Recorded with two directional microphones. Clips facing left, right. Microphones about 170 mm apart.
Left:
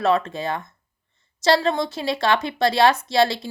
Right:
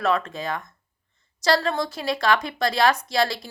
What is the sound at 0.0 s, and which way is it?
Speech, 25° left (ahead or behind).